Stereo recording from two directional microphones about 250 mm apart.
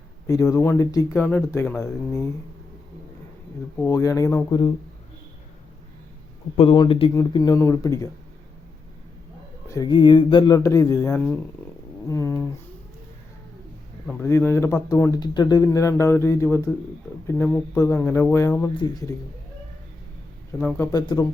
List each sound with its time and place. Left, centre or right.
0.3 s speech: centre
3.8 s speech: centre
6.6 s speech: left
9.6 s speech: centre
14.1 s speech: centre
20.6 s speech: centre